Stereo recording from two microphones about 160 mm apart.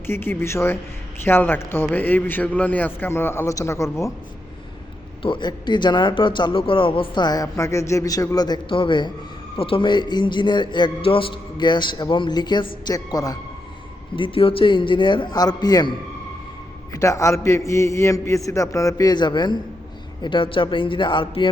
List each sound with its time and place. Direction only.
0.1 s a man's voice: 15° left (ahead or behind)
5.2 s a man's voice: 30° left (ahead or behind)
14.2 s a man's voice: 35° left (ahead or behind)
16.9 s a man's voice: 20° left (ahead or behind)